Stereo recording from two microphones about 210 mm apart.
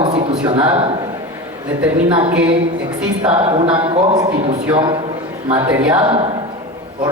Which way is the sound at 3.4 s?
25° right (ahead or behind).